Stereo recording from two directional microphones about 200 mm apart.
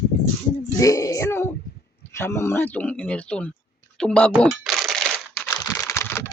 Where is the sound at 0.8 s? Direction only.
15° left (ahead or behind).